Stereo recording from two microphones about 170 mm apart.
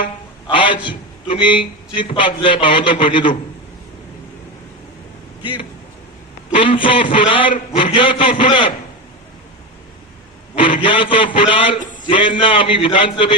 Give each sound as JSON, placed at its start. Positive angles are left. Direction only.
{"t": 0.0, "sound": "speech", "side_deg": 30}
{"t": 5.4, "sound": "a man's voice", "side_deg": 30}
{"t": 10.8, "sound": "a man's voice", "side_deg": 30}